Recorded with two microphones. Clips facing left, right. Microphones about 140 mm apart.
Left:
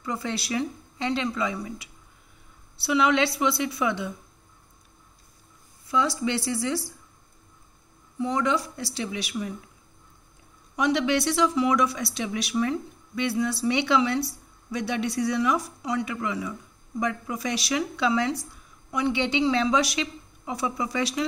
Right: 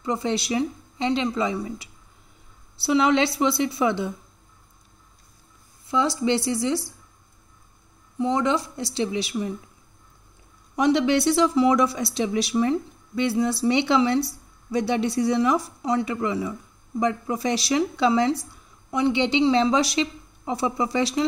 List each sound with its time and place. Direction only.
0.0 s a woman's voice: 25° right (ahead or behind)
5.9 s a woman's voice: 25° right (ahead or behind)
8.2 s a woman's voice: 25° right (ahead or behind)
10.8 s a woman's voice: 30° right (ahead or behind)